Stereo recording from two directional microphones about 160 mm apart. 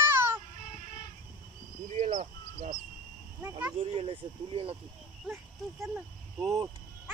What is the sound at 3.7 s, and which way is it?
Speech, 35° right (ahead or behind).